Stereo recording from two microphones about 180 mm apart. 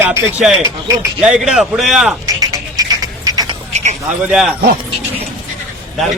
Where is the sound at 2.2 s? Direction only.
20° right (ahead or behind).